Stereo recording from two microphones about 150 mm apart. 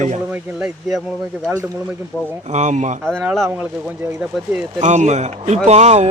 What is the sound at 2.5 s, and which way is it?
Speech, 50° right (ahead or behind).